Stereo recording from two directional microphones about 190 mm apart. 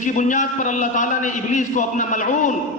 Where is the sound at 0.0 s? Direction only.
40° left (ahead or behind).